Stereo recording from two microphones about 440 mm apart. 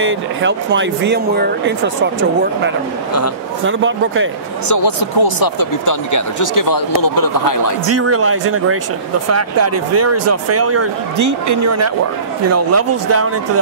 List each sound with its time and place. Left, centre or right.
0.0 s speech: right
3.6 s speech: right
4.6 s speech: left
7.9 s speech: right